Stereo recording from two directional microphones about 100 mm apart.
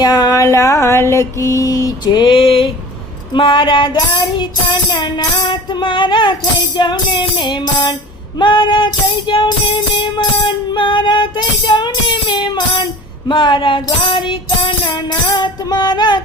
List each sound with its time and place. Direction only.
0.0 s mantra: 40° left (ahead or behind); by 2.6 s 60° left (ahead or behind)
3.3 s child singing: 55° left (ahead or behind)
13.2 s speech: 55° left (ahead or behind)
15.4 s child singing: 45° left (ahead or behind)